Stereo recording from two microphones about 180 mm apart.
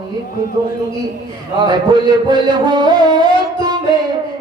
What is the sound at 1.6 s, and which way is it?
Music, 25° right (ahead or behind).